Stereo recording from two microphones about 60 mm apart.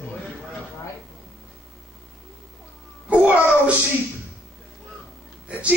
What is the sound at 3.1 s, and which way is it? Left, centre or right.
Babbling, right.